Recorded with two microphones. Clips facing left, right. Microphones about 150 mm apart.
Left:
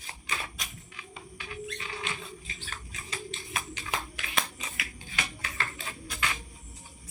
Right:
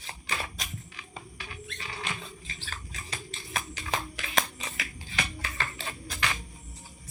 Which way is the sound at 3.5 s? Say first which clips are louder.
Right 3 dB; 40° right (ahead or behind).